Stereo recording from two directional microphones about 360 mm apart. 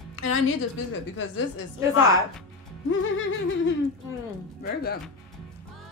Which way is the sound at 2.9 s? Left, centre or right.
Left.